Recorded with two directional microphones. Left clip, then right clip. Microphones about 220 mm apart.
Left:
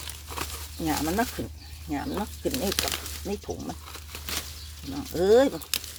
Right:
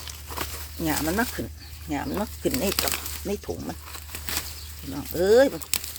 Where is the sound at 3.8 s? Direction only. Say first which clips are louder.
Right 2 dB; 35° right (ahead or behind).